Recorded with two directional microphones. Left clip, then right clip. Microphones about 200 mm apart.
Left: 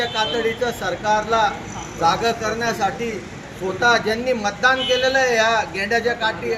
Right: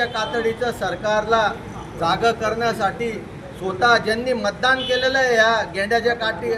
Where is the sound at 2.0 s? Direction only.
25° right (ahead or behind).